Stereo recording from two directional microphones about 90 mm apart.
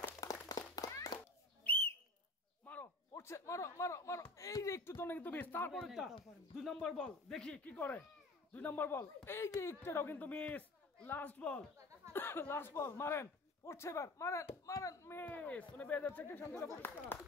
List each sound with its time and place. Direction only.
0.2 s clapping: 40° left (ahead or behind)
1.6 s whistle: 20° left (ahead or behind)
2.6 s a sound: 20° left (ahead or behind)
4.4 s speech: 40° left (ahead or behind)
5.7 s speech: centre (ahead or behind); by 15.1 s 35° left (ahead or behind)
15.1 s speech: 20° left (ahead or behind)